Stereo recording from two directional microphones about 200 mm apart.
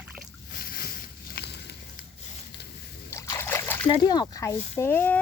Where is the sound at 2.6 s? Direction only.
55° left (ahead or behind).